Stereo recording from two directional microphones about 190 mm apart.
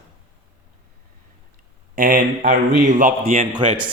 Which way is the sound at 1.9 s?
45° right (ahead or behind).